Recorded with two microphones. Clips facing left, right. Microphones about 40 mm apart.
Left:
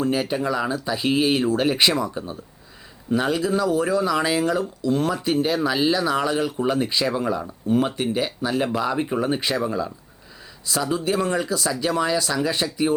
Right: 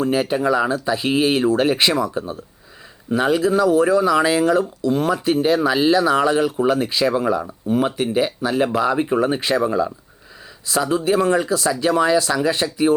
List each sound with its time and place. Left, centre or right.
0.0 s speech: centre
4.9 s speech: right
5.2 s speech: centre